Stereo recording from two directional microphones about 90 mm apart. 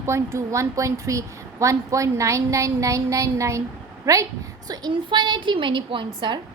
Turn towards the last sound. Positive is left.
turn(degrees=-65)  # may be behind; listen again after turning